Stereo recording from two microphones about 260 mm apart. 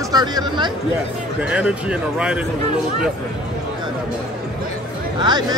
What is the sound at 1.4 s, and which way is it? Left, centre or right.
Speech, centre.